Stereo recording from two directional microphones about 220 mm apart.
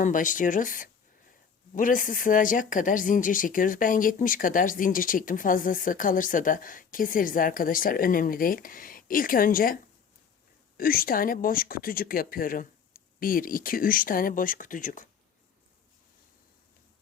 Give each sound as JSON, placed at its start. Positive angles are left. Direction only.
{"t": 0.0, "sound": "speech", "side_deg": 35}
{"t": 10.8, "sound": "speech", "side_deg": 40}